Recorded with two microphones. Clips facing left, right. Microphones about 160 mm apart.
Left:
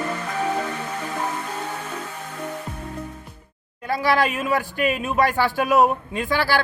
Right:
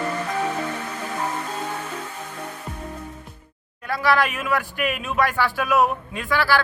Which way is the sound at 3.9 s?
35° left (ahead or behind).